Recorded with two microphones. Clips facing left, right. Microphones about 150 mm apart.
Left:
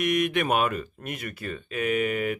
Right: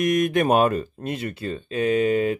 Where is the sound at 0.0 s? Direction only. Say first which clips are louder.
Right 4 dB; 45° right (ahead or behind).